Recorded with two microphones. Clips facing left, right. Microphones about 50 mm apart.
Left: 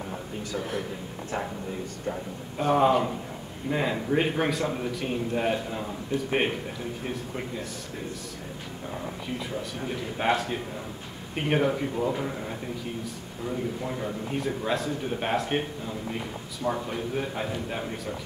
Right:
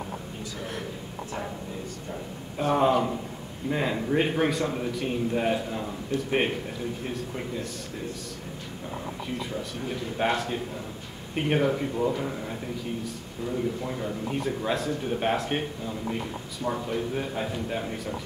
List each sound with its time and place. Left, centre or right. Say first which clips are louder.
0.6 s a man's voice: left 5 dB; centre
2.6 s a man's voice: left 1 dB; centre
6.1 s a man's voice: even; centre
9.8 s a man's voice: right 4 dB; centre
13.8 s a man's voice: right 1 dB; centre
16.6 s a man's voice: even; centre